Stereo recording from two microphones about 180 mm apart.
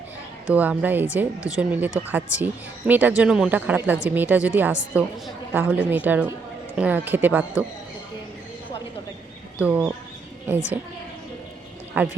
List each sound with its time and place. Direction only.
0.4 s speech: 10° right (ahead or behind)
9.6 s speech: 10° right (ahead or behind)
12.0 s speech: 10° right (ahead or behind)